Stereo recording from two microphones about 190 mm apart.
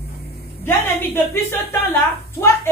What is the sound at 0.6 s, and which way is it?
Speech, 10° left (ahead or behind).